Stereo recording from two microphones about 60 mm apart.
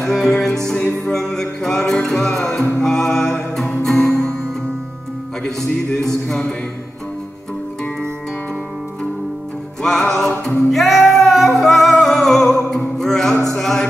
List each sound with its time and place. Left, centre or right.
0.1 s music: centre
0.7 s music: left
1.1 s music: centre
5.9 s music: centre
9.8 s music: centre